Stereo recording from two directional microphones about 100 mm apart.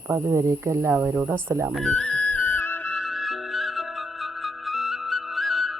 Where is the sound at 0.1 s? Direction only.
30° right (ahead or behind).